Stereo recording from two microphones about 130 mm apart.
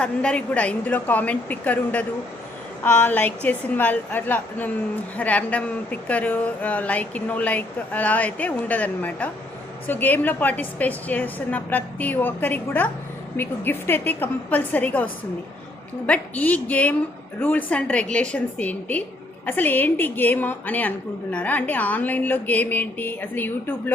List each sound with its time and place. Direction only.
0.0 s a woman's voice: 10° left (ahead or behind)
16.0 s a woman's voice: 10° left (ahead or behind)